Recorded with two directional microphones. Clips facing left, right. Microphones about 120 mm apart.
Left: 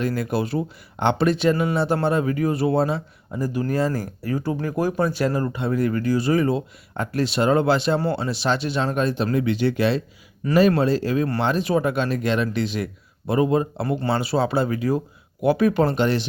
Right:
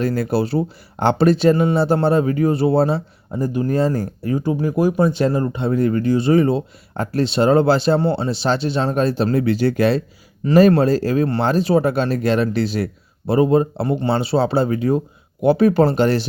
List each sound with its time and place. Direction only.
0.0 s speech: 35° right (ahead or behind)